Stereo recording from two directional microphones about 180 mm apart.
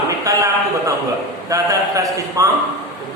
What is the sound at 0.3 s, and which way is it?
A man's voice, 15° right (ahead or behind).